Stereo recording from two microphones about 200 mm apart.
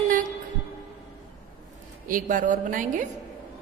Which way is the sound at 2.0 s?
40° right (ahead or behind).